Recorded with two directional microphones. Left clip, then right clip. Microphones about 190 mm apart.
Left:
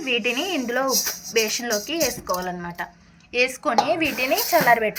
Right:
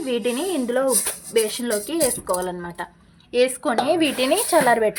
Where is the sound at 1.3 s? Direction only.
30° right (ahead or behind).